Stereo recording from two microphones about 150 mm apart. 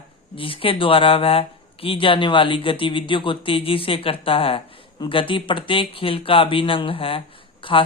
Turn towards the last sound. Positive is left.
turn(degrees=35)  # may be behind; listen again after turning